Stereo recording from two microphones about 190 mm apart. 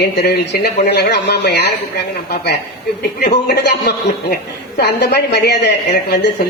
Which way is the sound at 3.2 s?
60° left (ahead or behind).